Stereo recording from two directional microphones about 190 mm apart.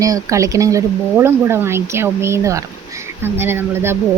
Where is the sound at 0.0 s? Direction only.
15° right (ahead or behind).